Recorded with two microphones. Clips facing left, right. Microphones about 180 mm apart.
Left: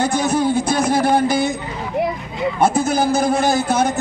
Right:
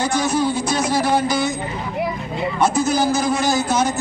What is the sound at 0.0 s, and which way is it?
Music, 55° left (ahead or behind).